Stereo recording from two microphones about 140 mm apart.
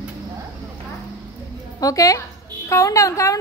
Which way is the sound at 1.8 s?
25° left (ahead or behind).